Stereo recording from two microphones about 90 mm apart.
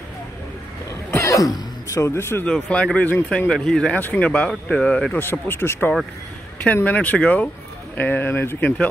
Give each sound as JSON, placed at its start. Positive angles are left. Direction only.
{"t": 1.1, "sound": "speech", "side_deg": 35}
{"t": 2.4, "sound": "speech", "side_deg": 15}
{"t": 5.1, "sound": "speech", "side_deg": 25}